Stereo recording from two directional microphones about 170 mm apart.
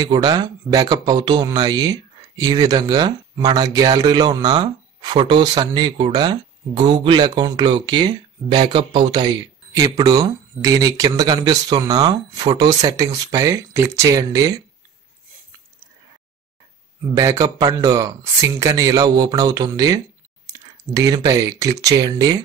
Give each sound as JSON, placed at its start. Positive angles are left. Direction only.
{"t": 0.0, "sound": "speech", "side_deg": -25}
{"t": 17.1, "sound": "speech", "side_deg": -20}